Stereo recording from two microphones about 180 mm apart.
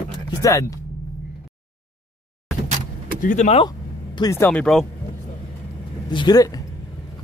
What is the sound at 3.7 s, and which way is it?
Speech, 20° left (ahead or behind).